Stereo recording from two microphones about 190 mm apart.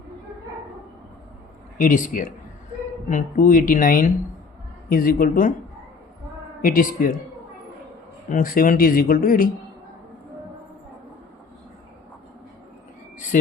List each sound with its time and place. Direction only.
1.8 s speech: 45° left (ahead or behind)
6.6 s speech: 45° left (ahead or behind)
8.3 s speech: 45° left (ahead or behind)